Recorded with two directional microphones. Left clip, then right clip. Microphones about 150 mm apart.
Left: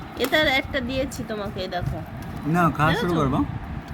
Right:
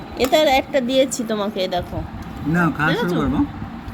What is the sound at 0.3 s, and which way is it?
Speech, 5° right (ahead or behind).